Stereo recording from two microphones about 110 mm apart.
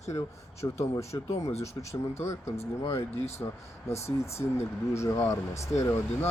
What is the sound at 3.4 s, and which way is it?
Speech, 35° left (ahead or behind).